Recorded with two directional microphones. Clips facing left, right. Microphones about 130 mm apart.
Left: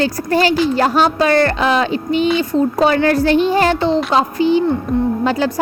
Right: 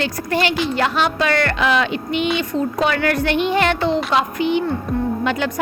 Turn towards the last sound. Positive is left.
turn(degrees=35)  # may be behind; listen again after turning